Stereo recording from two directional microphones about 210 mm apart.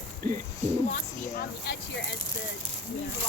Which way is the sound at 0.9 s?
35° left (ahead or behind).